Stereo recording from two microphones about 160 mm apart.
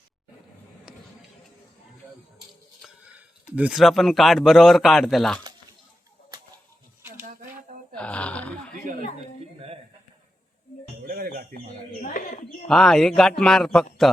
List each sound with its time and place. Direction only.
0.9 s music: 5° right (ahead or behind)
3.2 s speech: 10° right (ahead or behind)
7.9 s a sound: 10° left (ahead or behind)
11.0 s music: 65° right (ahead or behind)
12.0 s a sound: 55° left (ahead or behind)
12.6 s speech: 5° left (ahead or behind)